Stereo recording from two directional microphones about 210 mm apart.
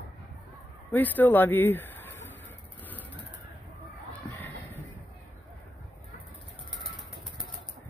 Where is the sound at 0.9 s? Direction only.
10° left (ahead or behind).